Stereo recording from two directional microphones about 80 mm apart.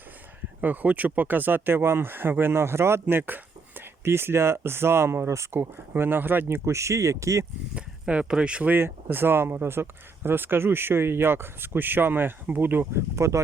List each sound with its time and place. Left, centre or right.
0.6 s speech: right
6.7 s speech: right
7.8 s speech: centre
8.7 s speech: right